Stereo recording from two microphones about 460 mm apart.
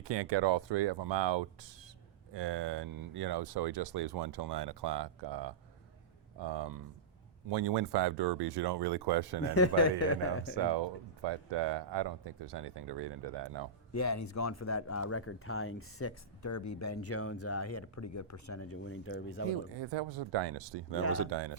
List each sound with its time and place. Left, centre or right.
0.0 s speech: right
9.6 s speech: left
10.5 s speech: right
13.9 s speech: left
19.5 s speech: right